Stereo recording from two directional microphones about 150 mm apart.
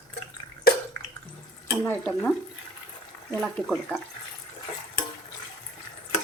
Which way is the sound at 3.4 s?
5° left (ahead or behind).